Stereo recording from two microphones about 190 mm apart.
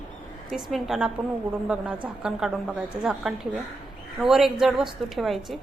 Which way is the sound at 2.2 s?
5° right (ahead or behind).